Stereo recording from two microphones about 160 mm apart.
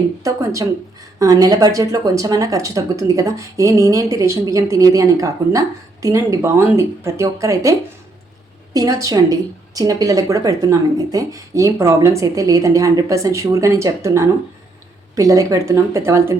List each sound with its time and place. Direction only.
0.2 s speech: 20° right (ahead or behind)